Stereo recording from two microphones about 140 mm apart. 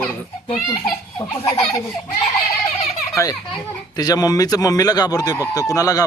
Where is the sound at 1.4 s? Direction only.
45° left (ahead or behind).